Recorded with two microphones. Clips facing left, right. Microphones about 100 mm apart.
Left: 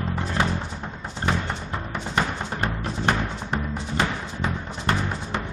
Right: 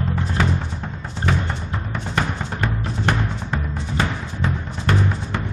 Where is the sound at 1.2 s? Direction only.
15° left (ahead or behind).